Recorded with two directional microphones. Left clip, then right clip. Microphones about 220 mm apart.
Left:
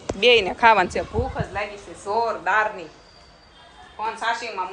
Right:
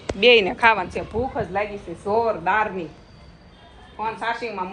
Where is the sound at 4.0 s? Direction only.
10° left (ahead or behind).